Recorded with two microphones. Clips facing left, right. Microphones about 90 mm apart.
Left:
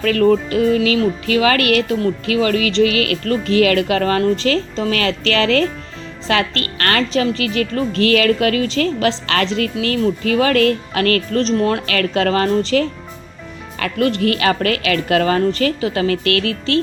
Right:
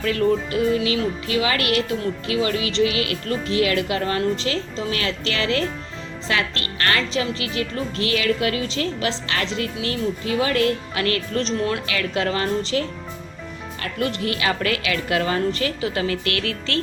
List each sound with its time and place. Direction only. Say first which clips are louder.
0.0 s a woman's voice: left 6 dB; 65° left (ahead or behind)
6.7 s a woman's voice: left 4 dB; 65° left (ahead or behind)
11.5 s speech: left 6 dB; 40° left (ahead or behind)
11.9 s a woman's voice: left 7 dB; 55° left (ahead or behind)
13.7 s speech: left 8 dB; 80° left; by 16.1 s 50° left (ahead or behind)
16.2 s speech: left 7 dB; 30° right (ahead or behind)